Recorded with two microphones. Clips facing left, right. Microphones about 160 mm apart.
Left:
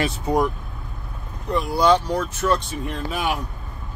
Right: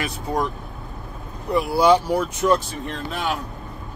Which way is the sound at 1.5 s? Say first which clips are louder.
Right 2 dB; 10° right (ahead or behind).